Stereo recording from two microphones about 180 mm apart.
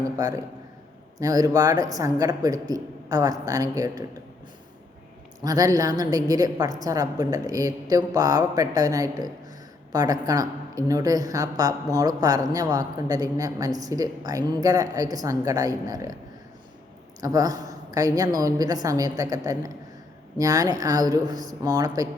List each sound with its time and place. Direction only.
0.2 s a woman's voice: 20° right (ahead or behind)
5.4 s a woman's voice: 20° right (ahead or behind)
17.2 s a woman's voice: 20° right (ahead or behind)